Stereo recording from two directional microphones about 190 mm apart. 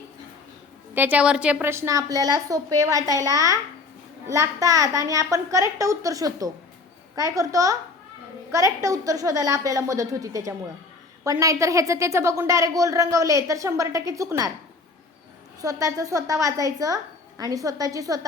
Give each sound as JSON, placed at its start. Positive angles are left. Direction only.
{"t": 0.9, "sound": "a woman's voice", "side_deg": -10}
{"t": 15.6, "sound": "a woman's voice", "side_deg": -20}